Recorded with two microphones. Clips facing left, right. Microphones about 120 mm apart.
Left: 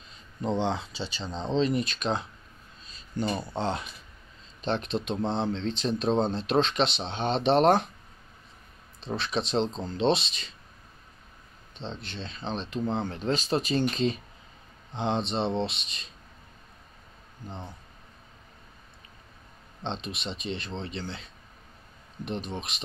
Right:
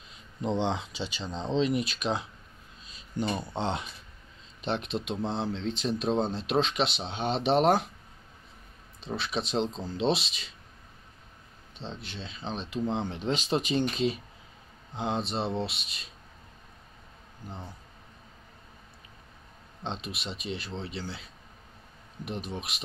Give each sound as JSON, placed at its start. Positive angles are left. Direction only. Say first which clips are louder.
{"t": 0.6, "sound": "speech", "louder": "left 1 dB", "side_deg": -15}
{"t": 2.8, "sound": "a sound", "louder": "left 1 dB", "side_deg": -15}
{"t": 3.5, "sound": "speech", "louder": "left 1 dB", "side_deg": -20}
{"t": 4.6, "sound": "speech", "louder": "left 2 dB", "side_deg": -10}
{"t": 5.1, "sound": "speech", "louder": "left 3 dB", "side_deg": 25}
{"t": 5.4, "sound": "speech", "louder": "left 2 dB", "side_deg": -5}
{"t": 9.0, "sound": "speech", "louder": "left 2 dB", "side_deg": -5}
{"t": 12.0, "sound": "speech", "louder": "left 2 dB", "side_deg": -5}
{"t": 17.5, "sound": "speech", "louder": "left 2 dB", "side_deg": 20}
{"t": 19.8, "sound": "speech", "louder": "left 2 dB", "side_deg": -5}